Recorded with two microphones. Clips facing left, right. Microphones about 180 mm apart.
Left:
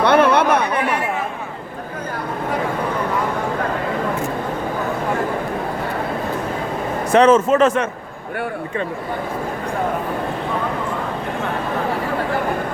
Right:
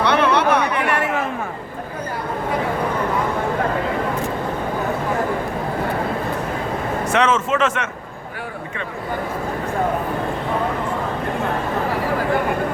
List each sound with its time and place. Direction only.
0.0 s chatter: 50° left (ahead or behind)
7.1 s a man's voice: 35° left (ahead or behind)